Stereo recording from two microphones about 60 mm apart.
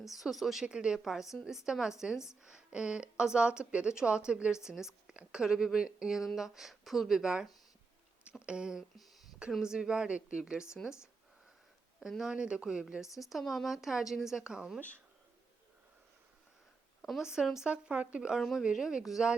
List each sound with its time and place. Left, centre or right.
0.0 s speech: centre
0.6 s speech: centre
11.9 s speech: centre
12.2 s speech: centre
17.0 s speech: centre
17.7 s speech: centre